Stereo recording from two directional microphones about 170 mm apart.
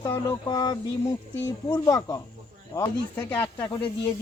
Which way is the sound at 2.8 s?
15° left (ahead or behind).